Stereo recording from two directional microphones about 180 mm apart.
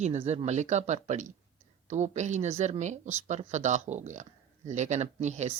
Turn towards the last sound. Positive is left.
turn(degrees=-40)  # may be behind; listen again after turning